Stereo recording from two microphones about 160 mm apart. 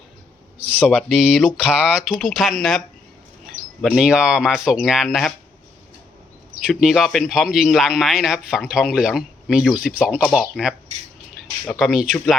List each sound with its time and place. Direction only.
0.8 s speech: 5° right (ahead or behind)
6.7 s speech: 5° right (ahead or behind)